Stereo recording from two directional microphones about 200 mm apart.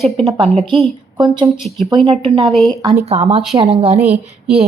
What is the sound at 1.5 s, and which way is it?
Speech, centre (ahead or behind).